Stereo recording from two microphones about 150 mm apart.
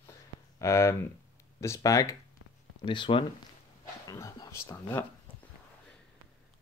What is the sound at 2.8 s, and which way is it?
Speech, 35° left (ahead or behind).